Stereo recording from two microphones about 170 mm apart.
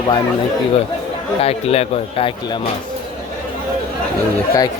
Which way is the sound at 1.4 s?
35° left (ahead or behind).